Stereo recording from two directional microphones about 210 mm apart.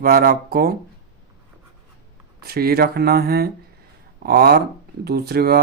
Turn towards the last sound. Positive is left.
turn(degrees=-50)  # may be behind; listen again after turning